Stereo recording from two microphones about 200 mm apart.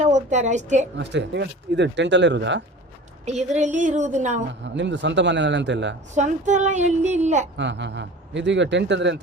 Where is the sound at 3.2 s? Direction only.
35° right (ahead or behind).